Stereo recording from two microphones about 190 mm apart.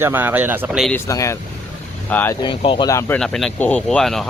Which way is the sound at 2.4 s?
25° left (ahead or behind).